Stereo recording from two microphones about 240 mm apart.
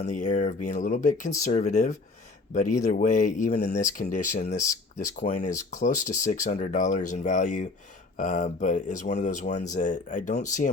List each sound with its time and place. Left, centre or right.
0.0 s speech: left